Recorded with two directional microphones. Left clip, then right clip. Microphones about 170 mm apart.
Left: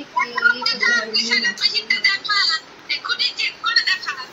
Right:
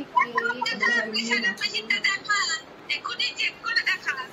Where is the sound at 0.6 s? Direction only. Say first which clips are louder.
Left 5 dB; 20° right (ahead or behind).